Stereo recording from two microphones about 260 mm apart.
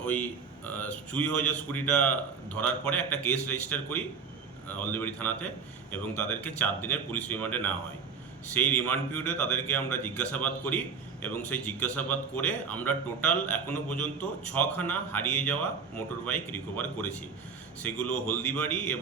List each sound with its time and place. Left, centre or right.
0.0 s a man's voice: centre